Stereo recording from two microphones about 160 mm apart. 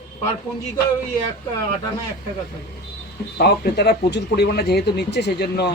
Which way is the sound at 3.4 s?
90° left.